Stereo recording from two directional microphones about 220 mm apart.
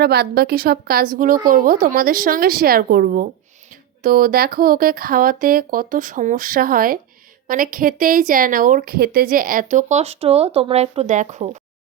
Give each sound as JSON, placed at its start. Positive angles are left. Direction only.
{"t": 0.0, "sound": "a woman's voice", "side_deg": -45}